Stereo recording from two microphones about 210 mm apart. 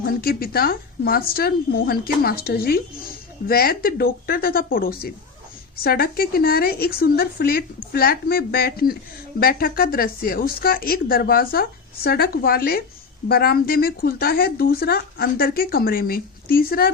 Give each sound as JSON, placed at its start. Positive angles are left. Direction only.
{"t": 0.0, "sound": "a woman's voice", "side_deg": 45}